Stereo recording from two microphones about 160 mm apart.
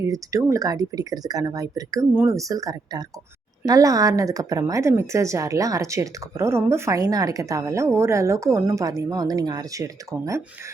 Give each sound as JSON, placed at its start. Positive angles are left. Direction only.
{"t": 0.0, "sound": "a woman's voice", "side_deg": -20}